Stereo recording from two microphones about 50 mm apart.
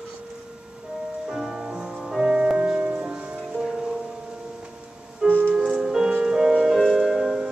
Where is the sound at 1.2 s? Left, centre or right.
Centre.